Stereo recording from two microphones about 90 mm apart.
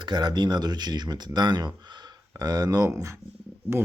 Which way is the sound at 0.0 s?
55° right (ahead or behind).